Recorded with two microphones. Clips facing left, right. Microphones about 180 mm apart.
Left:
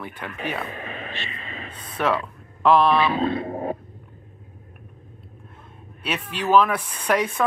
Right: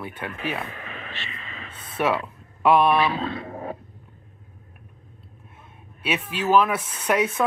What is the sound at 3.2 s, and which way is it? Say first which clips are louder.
Speech: left 6 dB; 20° left (ahead or behind).